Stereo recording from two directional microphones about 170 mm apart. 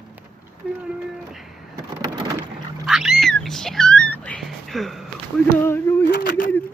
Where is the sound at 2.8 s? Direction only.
Centre (ahead or behind).